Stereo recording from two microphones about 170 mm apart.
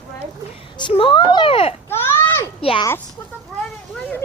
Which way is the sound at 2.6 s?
35° left (ahead or behind).